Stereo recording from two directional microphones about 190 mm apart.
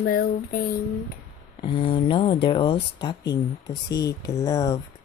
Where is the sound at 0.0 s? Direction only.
50° left (ahead or behind).